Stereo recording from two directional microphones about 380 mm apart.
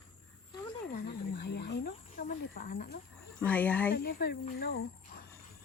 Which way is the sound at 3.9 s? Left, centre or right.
Left.